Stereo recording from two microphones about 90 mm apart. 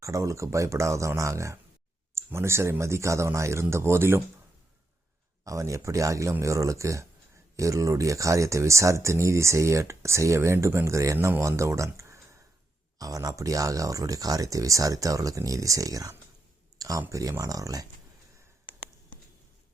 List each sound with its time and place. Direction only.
0.0 s speech: 35° right (ahead or behind)
5.5 s speech: 35° right (ahead or behind)
16.7 s a sound: 45° right (ahead or behind)
17.1 s speech: 35° right (ahead or behind)